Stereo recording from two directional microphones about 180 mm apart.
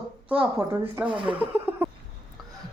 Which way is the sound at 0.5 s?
10° right (ahead or behind).